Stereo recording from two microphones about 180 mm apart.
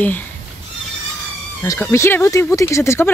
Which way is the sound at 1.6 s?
15° left (ahead or behind).